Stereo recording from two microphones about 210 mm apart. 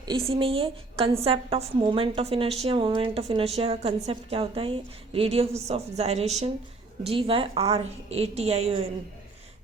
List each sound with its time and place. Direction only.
0.3 s a woman's voice: 25° right (ahead or behind)